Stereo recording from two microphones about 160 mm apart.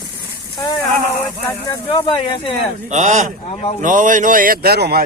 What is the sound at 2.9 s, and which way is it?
Speech, 50° right (ahead or behind).